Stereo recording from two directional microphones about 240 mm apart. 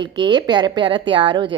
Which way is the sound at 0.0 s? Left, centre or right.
Centre.